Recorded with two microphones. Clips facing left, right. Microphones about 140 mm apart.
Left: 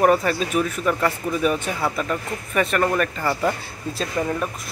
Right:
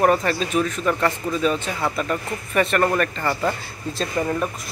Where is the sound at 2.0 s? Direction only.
Centre (ahead or behind).